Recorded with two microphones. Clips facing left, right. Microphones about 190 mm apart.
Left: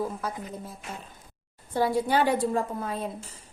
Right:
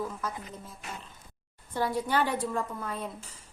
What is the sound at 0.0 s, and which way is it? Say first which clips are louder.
Speech: left 4 dB; 30° left (ahead or behind).